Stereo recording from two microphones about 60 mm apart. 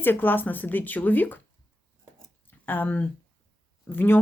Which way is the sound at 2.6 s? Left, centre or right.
Left.